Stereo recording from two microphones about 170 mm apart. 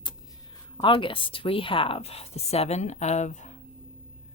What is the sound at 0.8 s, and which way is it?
Speech, 30° left (ahead or behind).